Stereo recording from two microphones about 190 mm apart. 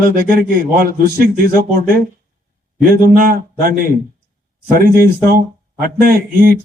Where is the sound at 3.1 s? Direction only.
50° right (ahead or behind).